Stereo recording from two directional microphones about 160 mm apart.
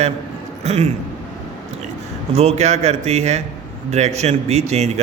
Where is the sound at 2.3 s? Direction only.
40° right (ahead or behind).